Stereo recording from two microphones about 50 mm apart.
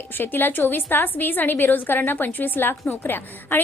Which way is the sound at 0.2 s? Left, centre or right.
Left.